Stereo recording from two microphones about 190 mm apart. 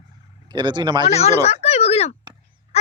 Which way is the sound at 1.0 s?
35° left (ahead or behind).